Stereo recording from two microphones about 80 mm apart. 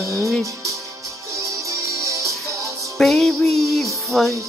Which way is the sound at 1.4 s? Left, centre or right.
Right.